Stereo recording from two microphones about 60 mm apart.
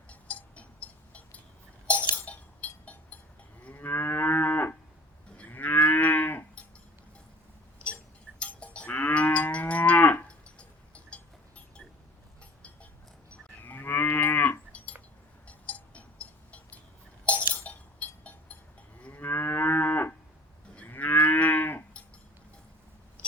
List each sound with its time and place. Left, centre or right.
0.1 s cowbell: left
2.1 s chink: left
3.8 s moo: left
8.4 s livestock: left
13.6 s moo: left
14.7 s glass: left
15.4 s cowbell: left
17.5 s chink: left
19.1 s moo: left